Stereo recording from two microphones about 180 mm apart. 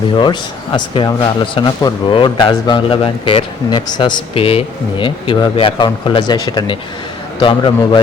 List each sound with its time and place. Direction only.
0.1 s a man's voice: 25° left (ahead or behind)